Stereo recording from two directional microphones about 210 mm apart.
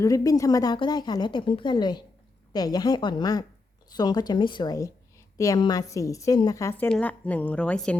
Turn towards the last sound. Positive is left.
turn(degrees=5)  # may be behind; listen again after turning